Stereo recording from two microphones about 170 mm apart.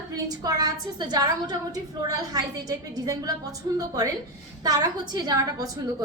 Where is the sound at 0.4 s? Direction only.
20° right (ahead or behind).